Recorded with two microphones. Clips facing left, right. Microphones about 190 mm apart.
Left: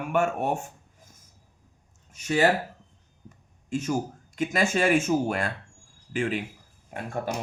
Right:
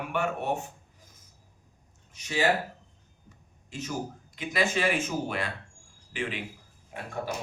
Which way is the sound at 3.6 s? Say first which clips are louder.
Left 7 dB; 50° left (ahead or behind).